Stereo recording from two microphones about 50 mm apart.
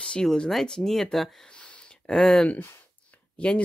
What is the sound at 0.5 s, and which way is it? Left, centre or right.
Speech, centre.